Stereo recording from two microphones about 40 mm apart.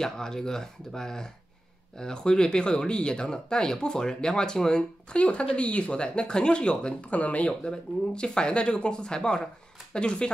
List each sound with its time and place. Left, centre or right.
0.0 s speech: centre
7.1 s speech: left
7.6 s speech: left